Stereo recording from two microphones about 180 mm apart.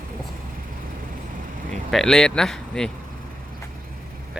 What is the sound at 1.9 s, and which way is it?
Speech, centre (ahead or behind).